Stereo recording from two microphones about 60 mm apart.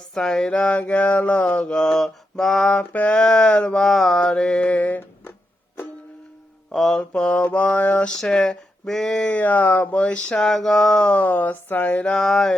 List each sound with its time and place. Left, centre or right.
0.1 s a sound: centre
1.7 s music: centre
2.4 s mantra: centre
2.6 s music: left
3.8 s music: centre; by 5.3 s left
6.7 s mantra: centre
7.1 s music: centre
7.4 s a sound: left
8.2 s music: centre
9.4 s a sound: left
9.9 s music: centre
10.5 s a sound: centre; by 12.0 s left
12.0 s music: centre